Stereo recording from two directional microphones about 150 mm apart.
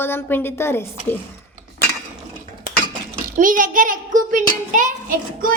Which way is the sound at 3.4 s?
65° right (ahead or behind).